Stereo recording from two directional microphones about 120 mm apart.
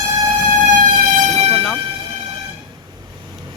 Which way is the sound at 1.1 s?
90° right.